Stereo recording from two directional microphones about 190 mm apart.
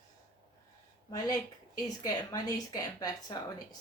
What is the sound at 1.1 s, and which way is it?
A woman's voice, 20° left (ahead or behind).